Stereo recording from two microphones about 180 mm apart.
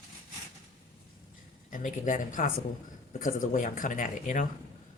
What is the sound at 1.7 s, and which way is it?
Speech, 45° left (ahead or behind).